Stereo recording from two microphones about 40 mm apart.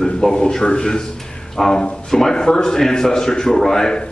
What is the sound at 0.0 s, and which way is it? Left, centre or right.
A man's voice, centre.